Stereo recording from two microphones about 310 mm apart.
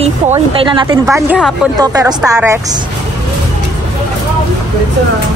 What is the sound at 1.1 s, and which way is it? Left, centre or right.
A woman's voice, centre.